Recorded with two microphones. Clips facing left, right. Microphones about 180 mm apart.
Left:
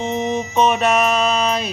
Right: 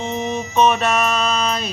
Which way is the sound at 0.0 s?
15° left (ahead or behind).